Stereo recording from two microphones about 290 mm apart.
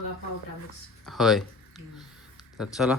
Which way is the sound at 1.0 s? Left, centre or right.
Centre.